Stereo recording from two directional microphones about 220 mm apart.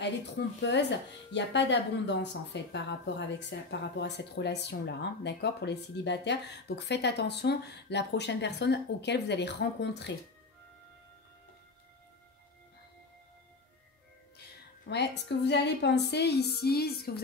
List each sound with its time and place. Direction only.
0.0 s speech: 50° left (ahead or behind)
14.9 s speech: 50° left (ahead or behind)